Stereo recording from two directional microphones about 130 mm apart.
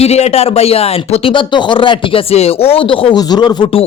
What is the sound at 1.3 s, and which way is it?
A man's voice, 35° left (ahead or behind).